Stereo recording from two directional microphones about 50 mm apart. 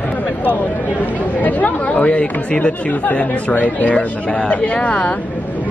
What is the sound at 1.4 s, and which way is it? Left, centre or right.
Speech, left.